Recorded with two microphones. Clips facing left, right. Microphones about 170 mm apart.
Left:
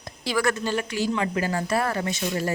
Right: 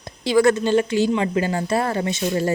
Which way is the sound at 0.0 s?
20° right (ahead or behind).